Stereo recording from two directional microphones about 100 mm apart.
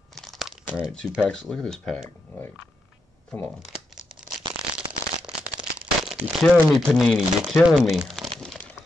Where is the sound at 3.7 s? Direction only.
5° right (ahead or behind).